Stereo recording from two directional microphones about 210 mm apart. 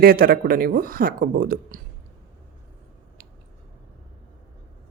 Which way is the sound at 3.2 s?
40° right (ahead or behind).